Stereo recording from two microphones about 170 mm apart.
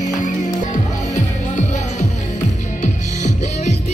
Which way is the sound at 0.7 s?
45° left (ahead or behind).